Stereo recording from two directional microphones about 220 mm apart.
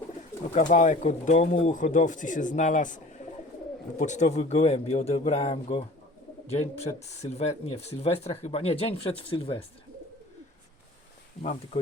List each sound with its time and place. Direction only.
0.5 s speech: 35° left (ahead or behind)